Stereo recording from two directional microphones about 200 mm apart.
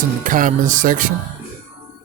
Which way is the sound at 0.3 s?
40° right (ahead or behind).